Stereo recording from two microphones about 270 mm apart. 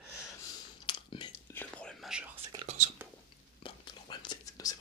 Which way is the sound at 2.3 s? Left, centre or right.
Right.